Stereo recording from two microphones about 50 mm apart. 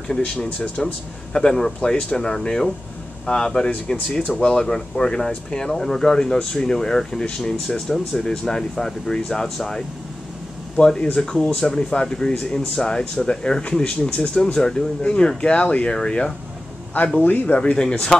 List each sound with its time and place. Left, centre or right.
0.4 s speech: left
17.2 s speech: left
17.6 s speech: centre